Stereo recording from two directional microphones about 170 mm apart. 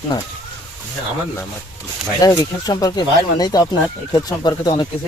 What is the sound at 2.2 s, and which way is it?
Speech, 20° left (ahead or behind).